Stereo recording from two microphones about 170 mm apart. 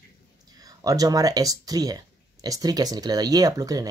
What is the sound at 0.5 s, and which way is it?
Speech, 20° right (ahead or behind).